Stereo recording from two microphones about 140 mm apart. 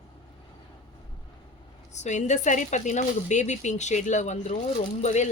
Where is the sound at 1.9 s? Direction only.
55° left (ahead or behind).